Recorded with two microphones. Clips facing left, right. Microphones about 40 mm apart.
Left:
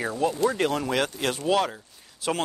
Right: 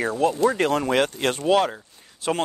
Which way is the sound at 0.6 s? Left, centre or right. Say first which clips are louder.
Right 3 dB; right.